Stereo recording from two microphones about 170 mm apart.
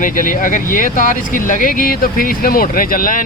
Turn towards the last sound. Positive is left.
turn(degrees=55)  # may be behind; listen again after turning